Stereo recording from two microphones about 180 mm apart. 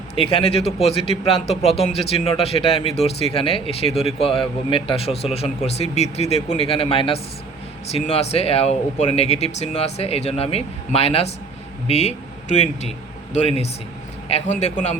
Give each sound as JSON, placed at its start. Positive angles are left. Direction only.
{"t": 0.2, "sound": "a man's voice", "side_deg": 30}
{"t": 14.3, "sound": "a man's voice", "side_deg": 40}